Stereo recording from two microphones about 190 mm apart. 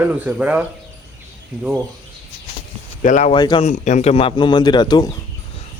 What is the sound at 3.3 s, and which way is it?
Speech, 25° left (ahead or behind).